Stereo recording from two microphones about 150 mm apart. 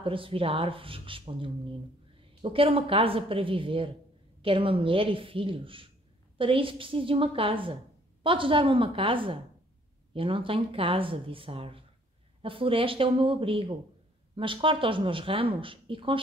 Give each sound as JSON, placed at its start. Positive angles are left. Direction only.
{"t": 0.0, "sound": "a woman's voice", "side_deg": -35}